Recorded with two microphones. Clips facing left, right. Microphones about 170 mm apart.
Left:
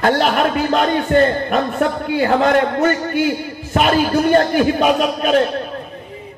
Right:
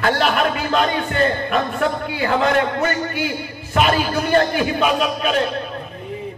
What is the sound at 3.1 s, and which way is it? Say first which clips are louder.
A man's voice: left 6 dB; 45° left (ahead or behind).